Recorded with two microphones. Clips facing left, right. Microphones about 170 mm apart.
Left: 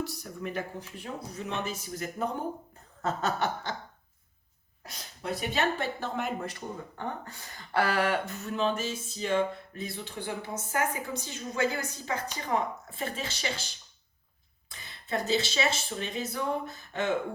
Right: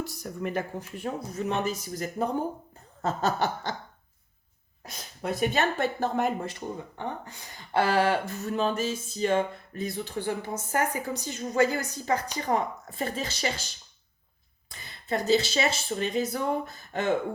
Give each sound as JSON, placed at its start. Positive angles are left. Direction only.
{"t": 0.0, "sound": "speech", "side_deg": -50}
{"t": 5.2, "sound": "speech", "side_deg": -50}
{"t": 6.9, "sound": "speech", "side_deg": -20}
{"t": 14.7, "sound": "speech", "side_deg": -35}